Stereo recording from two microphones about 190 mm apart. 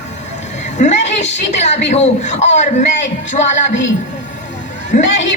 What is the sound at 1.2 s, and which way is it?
Speech, 70° left (ahead or behind).